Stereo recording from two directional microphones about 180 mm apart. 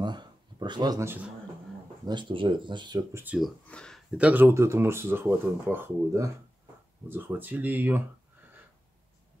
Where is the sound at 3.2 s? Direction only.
10° right (ahead or behind).